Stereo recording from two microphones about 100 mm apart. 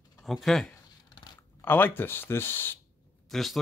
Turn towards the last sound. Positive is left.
turn(degrees=0)  # may be behind; listen again after turning